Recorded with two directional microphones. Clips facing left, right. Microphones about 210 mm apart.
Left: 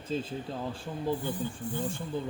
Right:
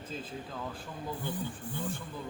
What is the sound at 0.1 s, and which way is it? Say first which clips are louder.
Speech: left 8 dB; 30° left (ahead or behind).